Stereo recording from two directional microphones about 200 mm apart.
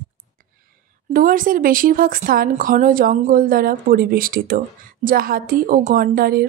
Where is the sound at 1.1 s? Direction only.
45° right (ahead or behind).